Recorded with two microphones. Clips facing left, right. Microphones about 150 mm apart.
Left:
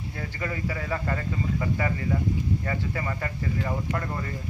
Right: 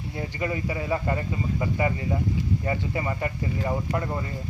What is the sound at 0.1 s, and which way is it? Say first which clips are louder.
Speech: right 4 dB; 20° right (ahead or behind).